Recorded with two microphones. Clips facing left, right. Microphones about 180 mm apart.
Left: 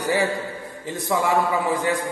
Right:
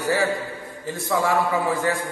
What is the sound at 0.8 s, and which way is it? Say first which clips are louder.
Speech: even; 20° left (ahead or behind).